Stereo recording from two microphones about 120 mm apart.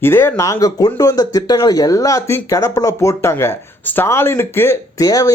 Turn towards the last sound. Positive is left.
turn(degrees=30)  # may be behind; listen again after turning